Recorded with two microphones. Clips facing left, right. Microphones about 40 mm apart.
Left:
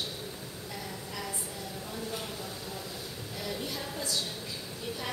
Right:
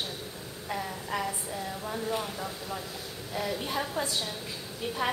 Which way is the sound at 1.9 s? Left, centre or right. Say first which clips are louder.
Right 6 dB; right.